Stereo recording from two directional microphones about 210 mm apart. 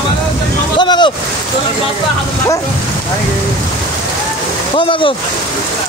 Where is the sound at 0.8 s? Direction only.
20° left (ahead or behind).